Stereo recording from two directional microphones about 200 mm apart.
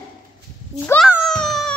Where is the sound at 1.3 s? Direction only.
Centre (ahead or behind).